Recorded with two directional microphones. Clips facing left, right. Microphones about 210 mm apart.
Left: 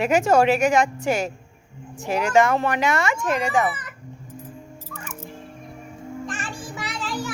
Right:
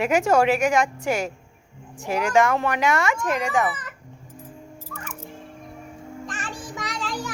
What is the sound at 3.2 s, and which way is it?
Speech, 25° left (ahead or behind).